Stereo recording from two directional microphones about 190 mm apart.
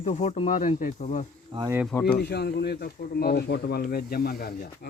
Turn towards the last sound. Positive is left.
turn(degrees=55)  # may be behind; listen again after turning